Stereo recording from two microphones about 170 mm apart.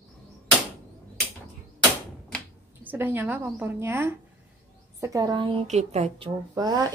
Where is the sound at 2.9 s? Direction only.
10° right (ahead or behind).